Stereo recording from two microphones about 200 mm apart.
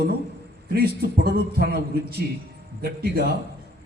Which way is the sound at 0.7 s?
50° right (ahead or behind).